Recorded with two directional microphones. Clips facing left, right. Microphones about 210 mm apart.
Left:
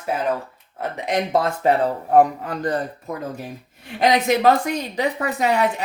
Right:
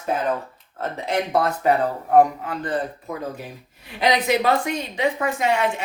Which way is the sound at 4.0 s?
45° left (ahead or behind).